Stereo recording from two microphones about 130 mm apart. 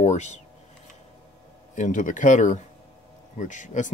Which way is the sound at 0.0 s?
60° left (ahead or behind).